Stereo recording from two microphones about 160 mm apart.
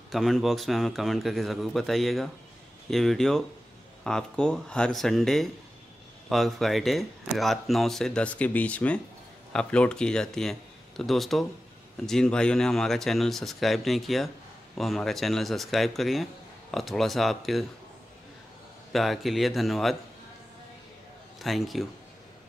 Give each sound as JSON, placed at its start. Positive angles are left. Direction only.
{"t": 0.1, "sound": "speech", "side_deg": 0}
{"t": 18.9, "sound": "speech", "side_deg": 0}
{"t": 21.4, "sound": "speech", "side_deg": 0}